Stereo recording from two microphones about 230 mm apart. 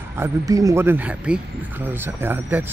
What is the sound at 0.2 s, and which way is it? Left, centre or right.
Speech, centre.